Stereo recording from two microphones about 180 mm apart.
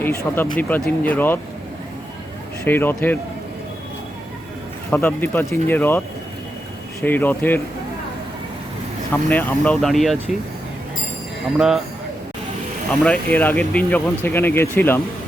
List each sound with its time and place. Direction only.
0.0 s speech: 15° left (ahead or behind)
2.6 s speech: 10° left (ahead or behind)
4.9 s speech: 10° left (ahead or behind)
7.0 s speech: 10° left (ahead or behind)
9.3 s speech: 10° left (ahead or behind)
11.5 s speech: 5° right (ahead or behind)
13.0 s speech: 5° left (ahead or behind)